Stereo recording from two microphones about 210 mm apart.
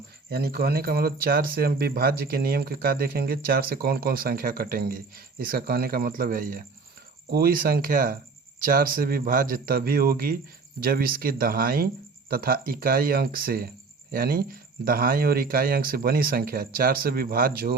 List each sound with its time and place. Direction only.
0.3 s speech: 50° right (ahead or behind)